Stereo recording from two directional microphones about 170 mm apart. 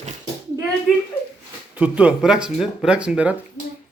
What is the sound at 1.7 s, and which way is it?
Speech, 10° right (ahead or behind).